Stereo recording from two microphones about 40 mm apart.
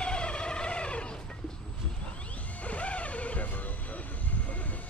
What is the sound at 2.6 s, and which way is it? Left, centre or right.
Music, left.